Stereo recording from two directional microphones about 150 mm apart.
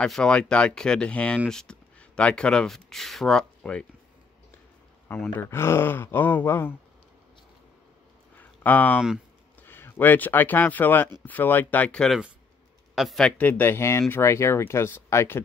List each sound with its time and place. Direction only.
0.0 s speech: 5° left (ahead or behind)
5.0 s speech: 15° left (ahead or behind)
8.4 s a sound: 10° left (ahead or behind)
9.6 s a man's voice: 15° left (ahead or behind)
13.4 s speech: 10° left (ahead or behind)